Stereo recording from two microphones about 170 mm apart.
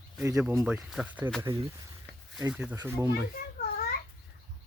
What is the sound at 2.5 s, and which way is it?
Speech, 10° right (ahead or behind).